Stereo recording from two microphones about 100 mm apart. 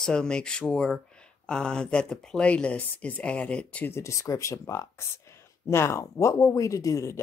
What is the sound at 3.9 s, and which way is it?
Speech, 30° left (ahead or behind).